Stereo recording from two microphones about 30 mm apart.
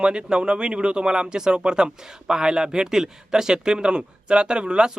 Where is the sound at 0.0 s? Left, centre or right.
Right.